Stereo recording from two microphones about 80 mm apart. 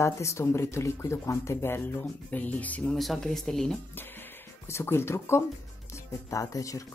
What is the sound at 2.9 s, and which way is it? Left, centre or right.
Speech, centre.